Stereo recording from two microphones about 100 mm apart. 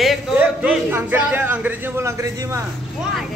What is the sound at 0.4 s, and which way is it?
A man's voice, 15° right (ahead or behind).